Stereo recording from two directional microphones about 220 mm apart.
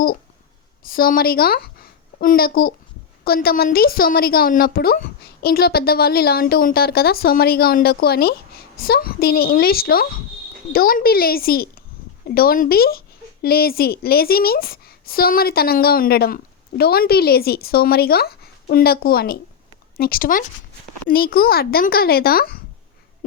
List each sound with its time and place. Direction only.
0.8 s a woman's voice: 40° left (ahead or behind)